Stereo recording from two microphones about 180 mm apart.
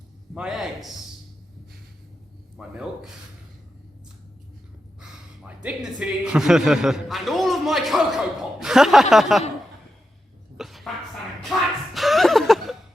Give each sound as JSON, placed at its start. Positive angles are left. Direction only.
{"t": 0.3, "sound": "a man's voice", "side_deg": 0}
{"t": 2.6, "sound": "a man's voice", "side_deg": -5}
{"t": 4.9, "sound": "a man's voice", "side_deg": -5}
{"t": 10.6, "sound": "a sound", "side_deg": 0}